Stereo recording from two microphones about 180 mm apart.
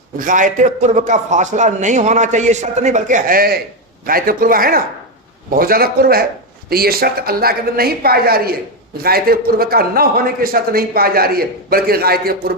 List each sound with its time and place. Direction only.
0.2 s a man's voice: 45° right (ahead or behind)